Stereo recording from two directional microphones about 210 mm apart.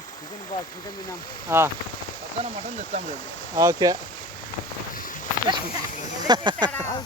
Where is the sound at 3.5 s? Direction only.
15° right (ahead or behind).